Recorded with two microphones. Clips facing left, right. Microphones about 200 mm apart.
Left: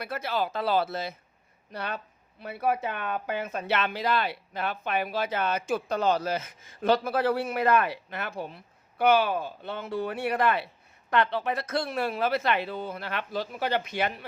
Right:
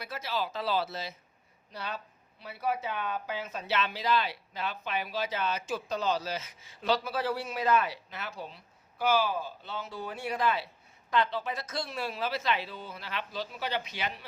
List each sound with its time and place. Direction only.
0.0 s speech: 55° left (ahead or behind)